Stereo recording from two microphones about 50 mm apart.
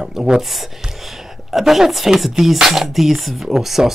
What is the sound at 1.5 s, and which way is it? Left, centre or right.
Speech, centre.